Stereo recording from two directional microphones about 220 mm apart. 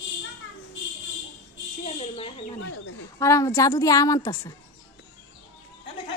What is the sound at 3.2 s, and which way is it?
A woman's voice, 15° left (ahead or behind).